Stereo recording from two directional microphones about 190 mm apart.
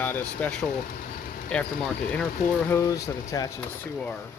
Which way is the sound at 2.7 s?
15° left (ahead or behind).